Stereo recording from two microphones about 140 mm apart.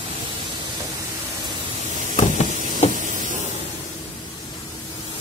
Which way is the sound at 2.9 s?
65° right (ahead or behind).